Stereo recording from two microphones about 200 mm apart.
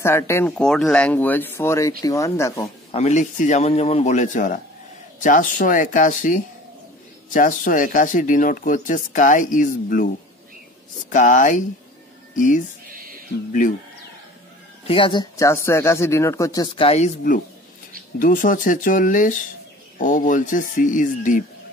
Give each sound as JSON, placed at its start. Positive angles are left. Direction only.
{"t": 0.0, "sound": "speech", "side_deg": 10}
{"t": 2.9, "sound": "speech", "side_deg": 35}
{"t": 11.1, "sound": "speech", "side_deg": 40}
{"t": 14.9, "sound": "speech", "side_deg": 25}
{"t": 16.7, "sound": "speech", "side_deg": 30}
{"t": 18.2, "sound": "speech", "side_deg": 40}